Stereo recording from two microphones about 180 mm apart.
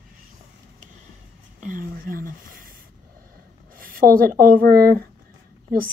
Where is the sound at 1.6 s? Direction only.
50° right (ahead or behind).